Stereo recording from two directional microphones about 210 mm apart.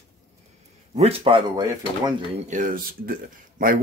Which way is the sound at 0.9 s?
25° right (ahead or behind).